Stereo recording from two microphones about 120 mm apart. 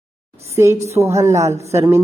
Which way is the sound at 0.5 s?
25° right (ahead or behind).